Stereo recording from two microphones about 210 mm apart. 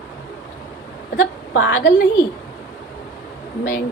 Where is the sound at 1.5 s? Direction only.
60° left (ahead or behind).